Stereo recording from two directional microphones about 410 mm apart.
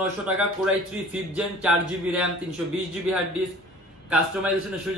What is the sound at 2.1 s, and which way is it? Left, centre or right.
Speech, centre.